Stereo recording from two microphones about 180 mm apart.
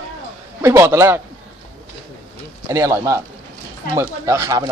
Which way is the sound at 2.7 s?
15° right (ahead or behind).